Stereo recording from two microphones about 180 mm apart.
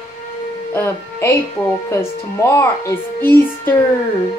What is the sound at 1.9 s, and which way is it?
Speech, 15° left (ahead or behind).